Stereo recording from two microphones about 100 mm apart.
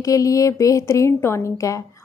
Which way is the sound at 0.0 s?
35° left (ahead or behind).